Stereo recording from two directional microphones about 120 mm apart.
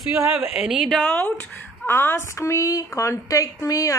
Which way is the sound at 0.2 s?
20° right (ahead or behind).